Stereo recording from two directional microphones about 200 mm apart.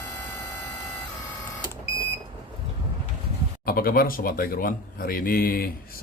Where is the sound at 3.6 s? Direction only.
50° left (ahead or behind).